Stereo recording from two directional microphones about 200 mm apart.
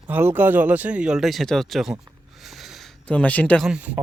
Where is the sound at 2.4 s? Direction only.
Centre (ahead or behind).